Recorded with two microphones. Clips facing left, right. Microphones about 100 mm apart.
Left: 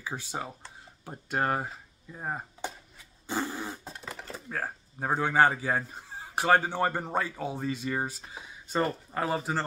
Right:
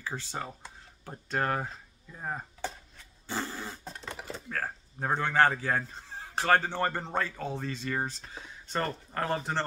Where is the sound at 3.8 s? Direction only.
5° left (ahead or behind).